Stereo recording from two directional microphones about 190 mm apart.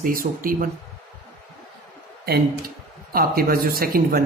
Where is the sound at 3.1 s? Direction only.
50° right (ahead or behind).